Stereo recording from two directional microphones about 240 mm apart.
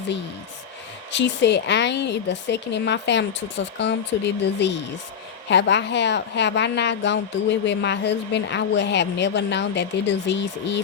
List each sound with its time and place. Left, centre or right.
1.1 s a woman's voice: left